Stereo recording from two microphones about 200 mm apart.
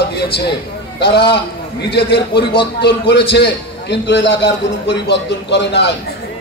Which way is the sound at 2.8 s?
55° left (ahead or behind).